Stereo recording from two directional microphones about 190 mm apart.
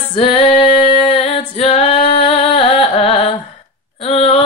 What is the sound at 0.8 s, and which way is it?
Female singing, 30° left (ahead or behind).